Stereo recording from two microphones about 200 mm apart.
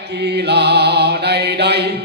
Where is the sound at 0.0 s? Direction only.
55° right (ahead or behind).